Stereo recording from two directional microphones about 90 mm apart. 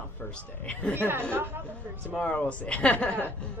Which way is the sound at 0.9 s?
25° right (ahead or behind).